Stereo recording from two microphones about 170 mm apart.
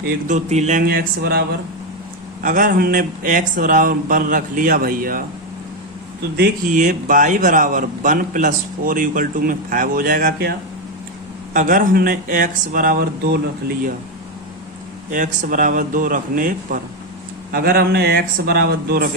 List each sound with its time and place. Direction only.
0.3 s a man's voice: 45° right (ahead or behind)
0.9 s a man's voice: 65° right (ahead or behind)
2.4 s a man's voice: 50° right (ahead or behind)
6.7 s a man's voice: 50° right (ahead or behind)
11.5 s speech: 50° right (ahead or behind); by 13.4 s 70° right (ahead or behind)
15.1 s a man's voice: 50° right (ahead or behind)
17.5 s a man's voice: 65° right (ahead or behind)